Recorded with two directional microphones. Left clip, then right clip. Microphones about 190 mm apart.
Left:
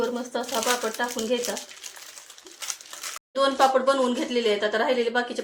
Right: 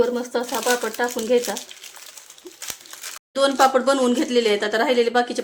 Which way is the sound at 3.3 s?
70° right (ahead or behind).